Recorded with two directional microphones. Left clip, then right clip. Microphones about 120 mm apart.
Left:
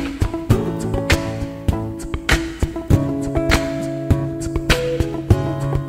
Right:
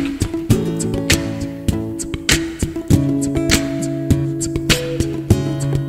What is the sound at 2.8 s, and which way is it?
Music, 15° right (ahead or behind).